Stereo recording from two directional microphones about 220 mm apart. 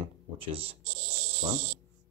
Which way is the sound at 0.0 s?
25° right (ahead or behind).